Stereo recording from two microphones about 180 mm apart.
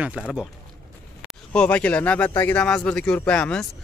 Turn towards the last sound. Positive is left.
turn(degrees=5)  # may be behind; listen again after turning